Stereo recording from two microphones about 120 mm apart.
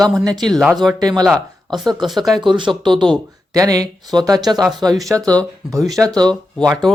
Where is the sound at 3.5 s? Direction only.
30° right (ahead or behind).